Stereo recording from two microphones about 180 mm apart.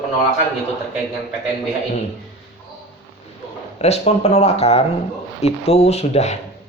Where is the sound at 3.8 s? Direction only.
35° left (ahead or behind).